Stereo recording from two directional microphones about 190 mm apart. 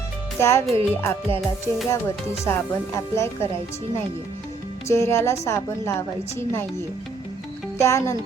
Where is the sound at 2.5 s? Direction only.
15° left (ahead or behind).